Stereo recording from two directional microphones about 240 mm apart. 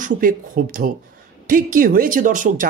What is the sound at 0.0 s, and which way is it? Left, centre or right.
Speech, right.